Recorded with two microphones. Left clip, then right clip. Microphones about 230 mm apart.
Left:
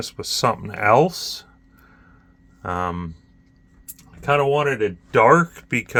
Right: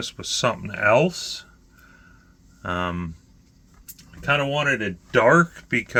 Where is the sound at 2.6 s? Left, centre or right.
Left.